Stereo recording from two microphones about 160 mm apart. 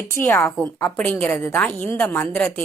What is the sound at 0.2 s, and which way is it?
A woman's voice, 10° left (ahead or behind).